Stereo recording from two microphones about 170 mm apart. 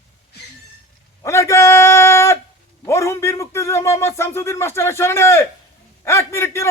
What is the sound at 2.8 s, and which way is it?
A man's voice, 15° left (ahead or behind).